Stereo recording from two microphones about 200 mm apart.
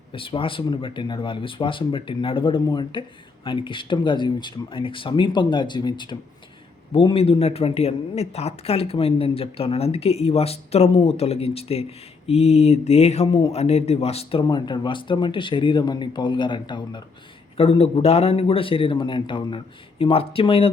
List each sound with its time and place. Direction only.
0.1 s speech: 25° left (ahead or behind)